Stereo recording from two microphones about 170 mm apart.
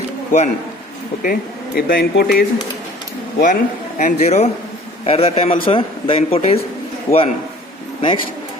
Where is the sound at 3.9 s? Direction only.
45° left (ahead or behind).